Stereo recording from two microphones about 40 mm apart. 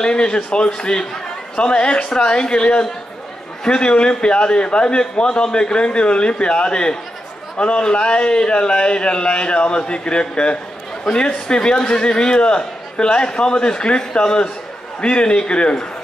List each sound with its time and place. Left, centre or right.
0.0 s a man's voice: left